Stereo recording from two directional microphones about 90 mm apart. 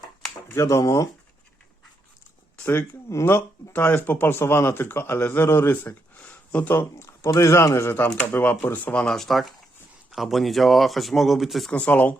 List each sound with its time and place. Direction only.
0.5 s speech: 35° left (ahead or behind)
2.6 s speech: 20° left (ahead or behind)
6.9 s speech: 30° left (ahead or behind); by 11.7 s centre (ahead or behind)
11.7 s speech: 15° left (ahead or behind)